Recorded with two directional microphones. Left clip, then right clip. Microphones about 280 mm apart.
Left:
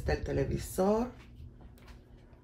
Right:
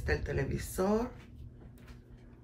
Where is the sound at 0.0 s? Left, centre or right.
Centre.